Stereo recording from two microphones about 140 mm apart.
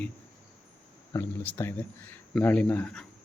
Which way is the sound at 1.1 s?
15° left (ahead or behind).